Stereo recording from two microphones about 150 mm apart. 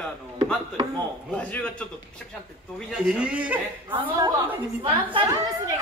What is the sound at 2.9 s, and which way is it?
Speech, 5° right (ahead or behind).